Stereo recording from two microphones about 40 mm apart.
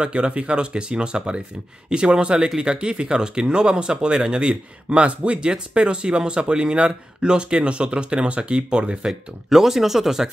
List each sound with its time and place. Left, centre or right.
0.0 s speech: right
9.0 s speech: centre